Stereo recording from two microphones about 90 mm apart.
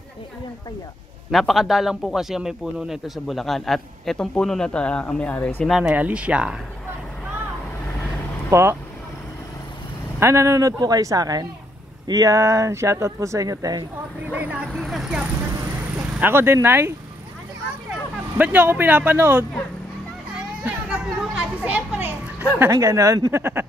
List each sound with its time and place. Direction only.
1.3 s a man's voice: centre (ahead or behind); by 5.5 s 20° left (ahead or behind)
5.7 s speech: 10° right (ahead or behind)
8.5 s speech: 30° right (ahead or behind)
10.2 s speech: 30° right (ahead or behind)
14.3 s speech: 20° right (ahead or behind)
14.8 s a man's voice: 5° right (ahead or behind)
16.2 s speech: 25° right (ahead or behind)
18.4 s speech: 20° right (ahead or behind)
20.3 s a child's voice: 10° right (ahead or behind)
22.7 s speech: 35° right (ahead or behind)
23.3 s speech: 25° right (ahead or behind)